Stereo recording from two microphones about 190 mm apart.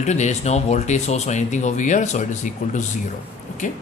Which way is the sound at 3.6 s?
40° left (ahead or behind).